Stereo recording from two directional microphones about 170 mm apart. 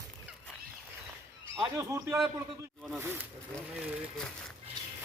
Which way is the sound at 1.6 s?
20° right (ahead or behind).